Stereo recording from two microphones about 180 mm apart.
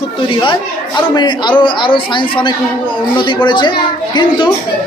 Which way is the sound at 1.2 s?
25° left (ahead or behind).